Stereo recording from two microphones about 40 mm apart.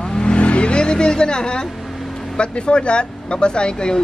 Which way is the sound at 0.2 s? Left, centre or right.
Left.